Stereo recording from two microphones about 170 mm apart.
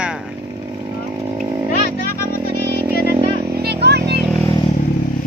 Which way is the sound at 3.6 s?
75° right (ahead or behind).